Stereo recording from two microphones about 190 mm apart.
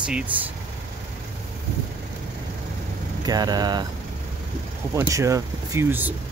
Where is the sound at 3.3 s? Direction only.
20° right (ahead or behind).